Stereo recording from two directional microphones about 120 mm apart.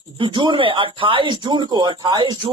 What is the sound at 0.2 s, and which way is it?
Speech, 45° right (ahead or behind).